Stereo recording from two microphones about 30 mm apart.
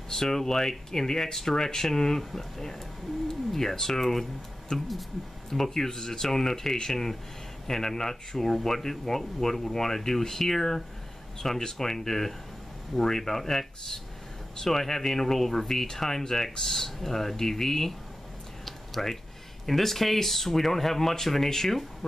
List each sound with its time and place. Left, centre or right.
0.1 s speech: centre
18.7 s a sound: centre
19.6 s speech: centre